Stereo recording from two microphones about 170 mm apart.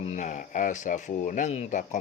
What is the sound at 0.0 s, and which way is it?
Speech, 45° left (ahead or behind).